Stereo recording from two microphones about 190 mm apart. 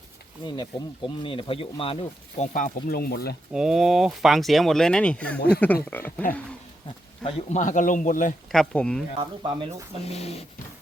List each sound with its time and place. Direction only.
0.4 s speech: 25° left (ahead or behind); by 3.3 s 55° left (ahead or behind)
3.5 s speech: 5° right (ahead or behind)
7.3 s speech: 35° left (ahead or behind)
8.5 s speech: 5° left (ahead or behind)
9.1 s speech: 25° right (ahead or behind)
10.1 s dog: 35° left (ahead or behind)